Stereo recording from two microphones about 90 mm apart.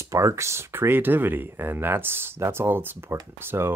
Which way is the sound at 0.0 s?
35° right (ahead or behind).